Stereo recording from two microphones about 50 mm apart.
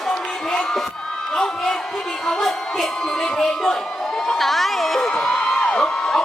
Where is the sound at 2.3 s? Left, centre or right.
Centre.